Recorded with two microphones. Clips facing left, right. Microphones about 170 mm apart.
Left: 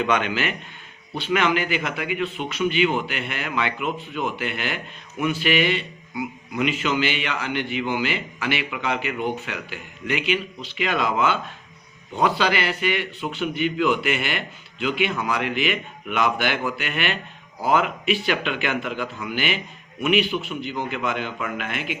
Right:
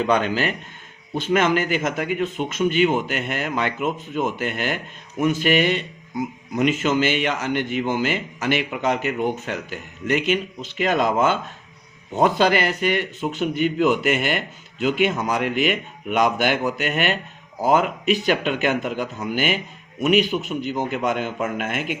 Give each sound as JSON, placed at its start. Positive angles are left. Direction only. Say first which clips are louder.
{"t": 0.0, "sound": "a man's voice", "louder": "right 3 dB", "side_deg": -35}